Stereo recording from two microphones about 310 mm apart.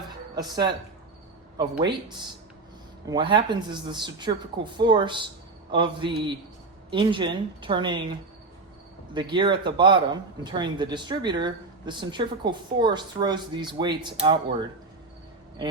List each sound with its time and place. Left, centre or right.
0.3 s speech: centre
9.1 s speech: centre